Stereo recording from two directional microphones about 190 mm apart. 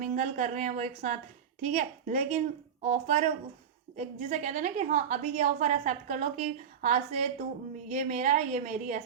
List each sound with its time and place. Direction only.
0.0 s a woman's voice: 40° right (ahead or behind)